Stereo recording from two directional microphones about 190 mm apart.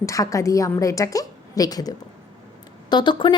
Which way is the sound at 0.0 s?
15° left (ahead or behind).